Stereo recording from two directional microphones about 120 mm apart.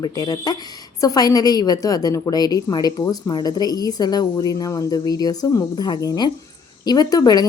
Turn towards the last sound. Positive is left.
turn(degrees=30)  # may be behind; listen again after turning